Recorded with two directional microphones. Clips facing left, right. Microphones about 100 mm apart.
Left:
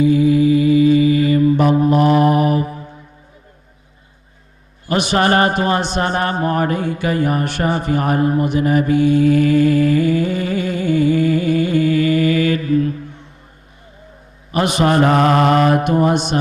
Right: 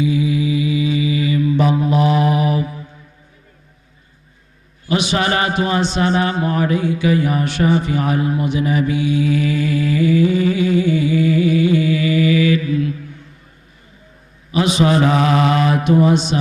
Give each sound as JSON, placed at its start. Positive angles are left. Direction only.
{"t": 0.0, "sound": "mantra", "side_deg": 50}
{"t": 4.9, "sound": "speech", "side_deg": 50}
{"t": 14.5, "sound": "speech", "side_deg": 55}